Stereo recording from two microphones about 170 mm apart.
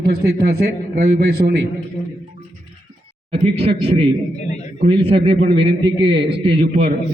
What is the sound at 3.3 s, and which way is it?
Speech, 35° right (ahead or behind).